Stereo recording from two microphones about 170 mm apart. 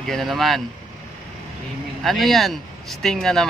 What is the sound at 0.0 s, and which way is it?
Speech, centre (ahead or behind).